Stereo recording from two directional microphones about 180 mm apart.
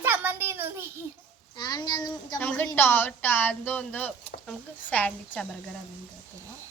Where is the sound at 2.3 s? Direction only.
10° left (ahead or behind).